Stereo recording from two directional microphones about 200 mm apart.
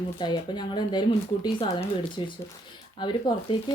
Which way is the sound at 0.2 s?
20° left (ahead or behind).